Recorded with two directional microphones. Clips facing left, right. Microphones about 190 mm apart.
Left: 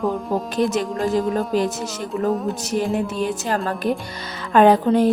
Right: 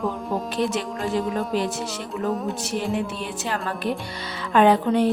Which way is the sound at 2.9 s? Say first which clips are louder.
Left 5 dB; 40° left (ahead or behind).